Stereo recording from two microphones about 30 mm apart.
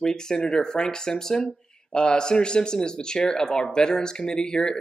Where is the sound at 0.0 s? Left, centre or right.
Left.